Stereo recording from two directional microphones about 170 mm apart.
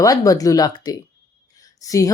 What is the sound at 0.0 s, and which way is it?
A woman's voice, 20° left (ahead or behind).